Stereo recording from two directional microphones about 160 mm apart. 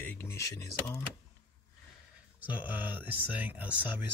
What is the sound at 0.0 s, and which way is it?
Speech, 15° left (ahead or behind).